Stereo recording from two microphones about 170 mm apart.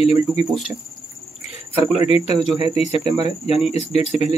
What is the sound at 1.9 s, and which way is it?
A man's voice, 35° left (ahead or behind).